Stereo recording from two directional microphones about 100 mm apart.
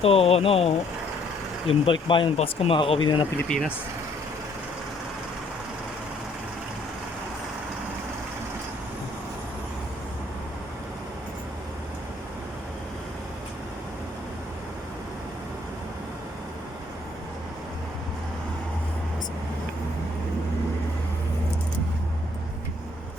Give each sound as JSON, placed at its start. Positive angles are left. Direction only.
{"t": 0.0, "sound": "speech", "side_deg": 75}
{"t": 1.6, "sound": "speech", "side_deg": 60}
{"t": 3.5, "sound": "speech", "side_deg": 10}